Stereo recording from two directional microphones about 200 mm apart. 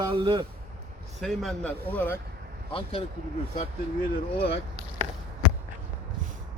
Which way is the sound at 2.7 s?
30° left (ahead or behind).